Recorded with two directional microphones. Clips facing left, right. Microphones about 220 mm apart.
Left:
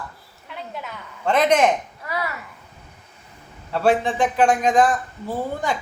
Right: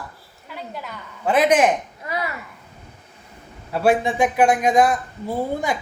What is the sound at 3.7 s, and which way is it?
Speech, 10° right (ahead or behind).